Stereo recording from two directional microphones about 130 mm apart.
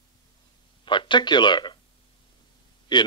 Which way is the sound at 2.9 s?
35° left (ahead or behind).